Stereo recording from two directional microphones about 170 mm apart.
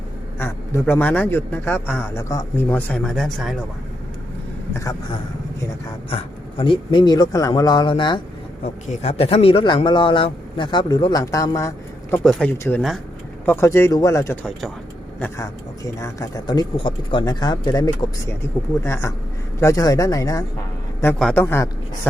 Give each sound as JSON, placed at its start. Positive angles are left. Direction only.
{"t": 0.3, "sound": "a man's voice", "side_deg": 15}
{"t": 4.7, "sound": "a man's voice", "side_deg": 20}
{"t": 6.1, "sound": "speech", "side_deg": 30}
{"t": 8.6, "sound": "speech", "side_deg": 40}
{"t": 12.2, "sound": "a man's voice", "side_deg": 5}
{"t": 21.2, "sound": "a man's voice", "side_deg": 10}